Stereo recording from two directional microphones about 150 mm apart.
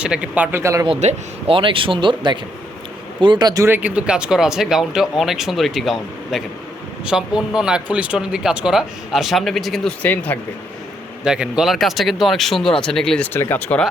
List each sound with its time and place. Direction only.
0.0 s speech: 5° right (ahead or behind)
0.9 s speech: 45° right (ahead or behind); by 9.9 s centre (ahead or behind)
10.0 s speech: 10° left (ahead or behind)
11.2 s speech: 5° right (ahead or behind)